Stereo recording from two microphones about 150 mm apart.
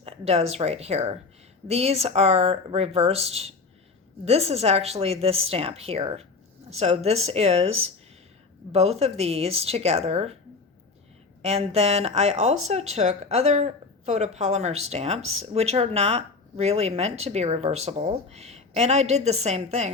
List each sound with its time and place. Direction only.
0.0 s speech: 45° right (ahead or behind)
11.4 s speech: 45° right (ahead or behind)